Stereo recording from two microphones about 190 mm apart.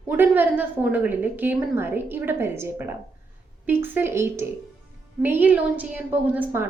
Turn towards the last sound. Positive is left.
turn(degrees=-10)  # may be behind; listen again after turning